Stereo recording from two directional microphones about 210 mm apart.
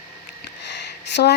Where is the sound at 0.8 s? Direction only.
55° left (ahead or behind).